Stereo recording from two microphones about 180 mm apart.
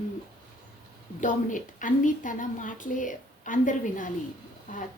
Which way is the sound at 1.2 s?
45° left (ahead or behind).